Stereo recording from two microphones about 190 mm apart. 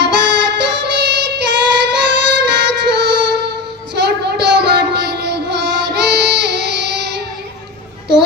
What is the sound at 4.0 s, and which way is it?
Child singing, 65° right (ahead or behind).